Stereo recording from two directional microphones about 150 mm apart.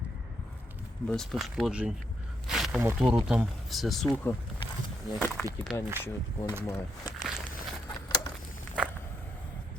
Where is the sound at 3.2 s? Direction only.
Centre (ahead or behind).